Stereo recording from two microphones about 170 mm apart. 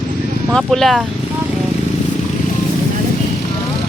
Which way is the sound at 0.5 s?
Centre (ahead or behind).